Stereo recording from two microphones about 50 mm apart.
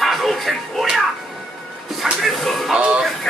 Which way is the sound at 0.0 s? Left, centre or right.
Centre.